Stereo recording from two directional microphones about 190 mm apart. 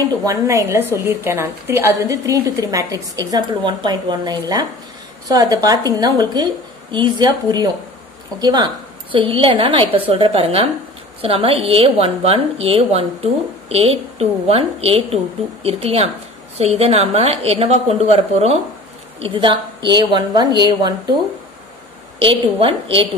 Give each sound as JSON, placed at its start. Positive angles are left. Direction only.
{"t": 0.0, "sound": "a woman's voice", "side_deg": -20}
{"t": 22.2, "sound": "a woman's voice", "side_deg": -25}